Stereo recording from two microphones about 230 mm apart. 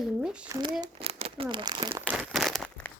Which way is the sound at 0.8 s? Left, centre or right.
Right.